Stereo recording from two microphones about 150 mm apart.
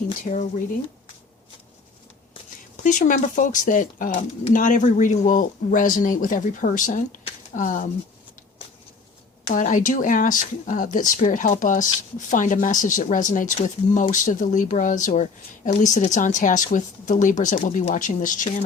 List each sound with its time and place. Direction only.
0.3 s speech: 50° left (ahead or behind)
2.7 s speech: 60° left (ahead or behind)
9.5 s speech: 60° left (ahead or behind)